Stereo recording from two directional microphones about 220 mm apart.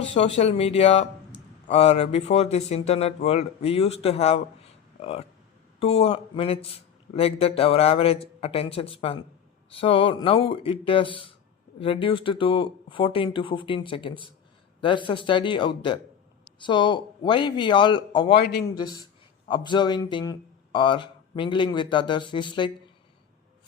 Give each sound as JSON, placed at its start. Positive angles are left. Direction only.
{"t": 0.0, "sound": "a man's voice", "side_deg": 25}
{"t": 18.3, "sound": "a man's voice", "side_deg": 45}
{"t": 18.7, "sound": "a man's voice", "side_deg": 20}